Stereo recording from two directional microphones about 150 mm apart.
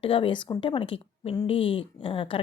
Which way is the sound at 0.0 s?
35° left (ahead or behind).